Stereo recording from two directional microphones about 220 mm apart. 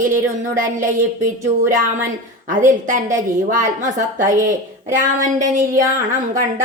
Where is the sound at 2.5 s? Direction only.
35° right (ahead or behind).